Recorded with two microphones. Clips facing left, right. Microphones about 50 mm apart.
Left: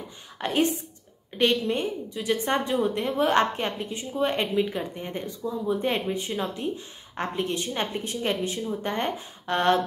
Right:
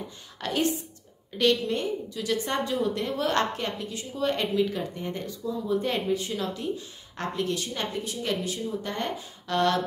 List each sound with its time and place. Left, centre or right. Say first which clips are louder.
0.4 s a woman's voice: left 2 dB; left